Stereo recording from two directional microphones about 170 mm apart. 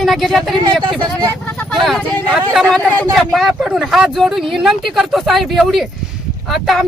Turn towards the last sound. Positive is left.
turn(degrees=0)  # may be behind; listen again after turning